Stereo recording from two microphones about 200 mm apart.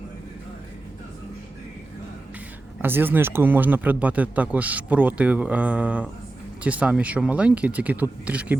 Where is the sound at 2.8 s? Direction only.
10° right (ahead or behind).